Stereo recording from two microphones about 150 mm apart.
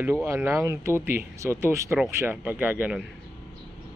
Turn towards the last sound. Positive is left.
turn(degrees=-10)  # may be behind; listen again after turning